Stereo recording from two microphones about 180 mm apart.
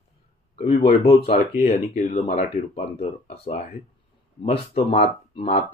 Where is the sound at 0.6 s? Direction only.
35° left (ahead or behind).